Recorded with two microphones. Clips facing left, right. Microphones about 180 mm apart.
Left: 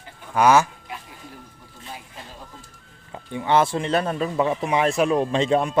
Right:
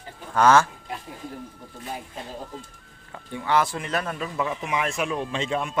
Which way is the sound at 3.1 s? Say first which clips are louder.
Left 3 dB; 20° left (ahead or behind).